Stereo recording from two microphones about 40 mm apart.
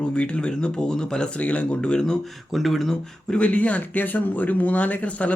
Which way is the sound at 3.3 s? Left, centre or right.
Left.